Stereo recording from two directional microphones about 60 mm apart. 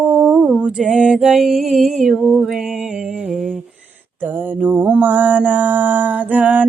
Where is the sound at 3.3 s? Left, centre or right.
Centre.